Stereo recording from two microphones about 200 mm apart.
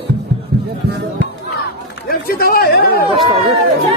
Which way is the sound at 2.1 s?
50° left (ahead or behind).